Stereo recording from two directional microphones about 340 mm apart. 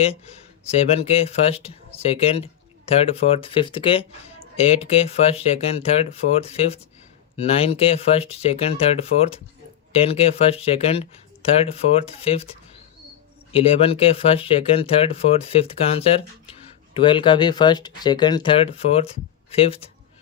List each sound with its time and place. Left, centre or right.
0.7 s speech: centre
13.5 s speech: centre